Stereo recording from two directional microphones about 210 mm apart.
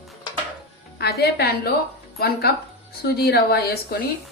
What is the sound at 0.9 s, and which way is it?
A woman's voice, 50° left (ahead or behind).